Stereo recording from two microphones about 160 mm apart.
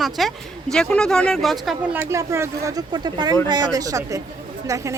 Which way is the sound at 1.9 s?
20° right (ahead or behind).